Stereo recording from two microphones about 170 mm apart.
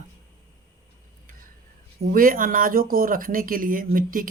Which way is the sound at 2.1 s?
55° right (ahead or behind).